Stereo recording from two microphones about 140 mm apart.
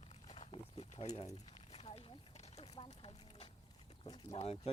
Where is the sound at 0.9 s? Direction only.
50° left (ahead or behind).